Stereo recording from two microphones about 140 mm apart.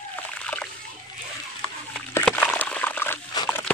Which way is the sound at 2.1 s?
10° left (ahead or behind).